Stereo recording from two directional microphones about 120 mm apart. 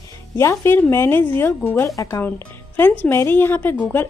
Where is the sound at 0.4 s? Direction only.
20° left (ahead or behind).